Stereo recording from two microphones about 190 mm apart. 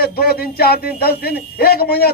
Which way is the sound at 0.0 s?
55° left (ahead or behind).